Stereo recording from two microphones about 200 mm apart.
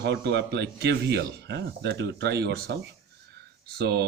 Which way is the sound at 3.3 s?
55° right (ahead or behind).